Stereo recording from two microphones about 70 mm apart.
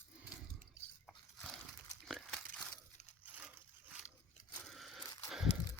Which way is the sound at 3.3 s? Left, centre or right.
Centre.